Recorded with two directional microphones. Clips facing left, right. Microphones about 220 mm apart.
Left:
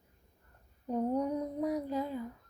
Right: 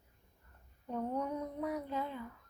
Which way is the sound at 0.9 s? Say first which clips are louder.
Left 6 dB; 35° left (ahead or behind).